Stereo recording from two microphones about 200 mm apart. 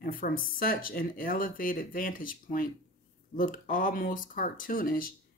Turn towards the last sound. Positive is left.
turn(degrees=45)  # may be behind; listen again after turning